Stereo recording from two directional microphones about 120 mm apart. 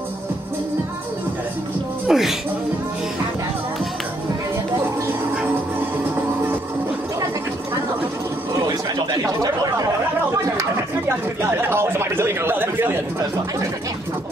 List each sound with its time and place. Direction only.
2.0 s speech: centre (ahead or behind)
9.2 s chatter: 30° right (ahead or behind)
11.7 s speech: 20° right (ahead or behind)